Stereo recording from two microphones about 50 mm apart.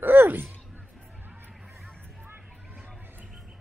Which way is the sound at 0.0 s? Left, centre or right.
Right.